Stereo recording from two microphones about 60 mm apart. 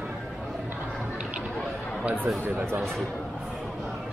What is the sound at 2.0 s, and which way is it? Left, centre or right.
Speech, right.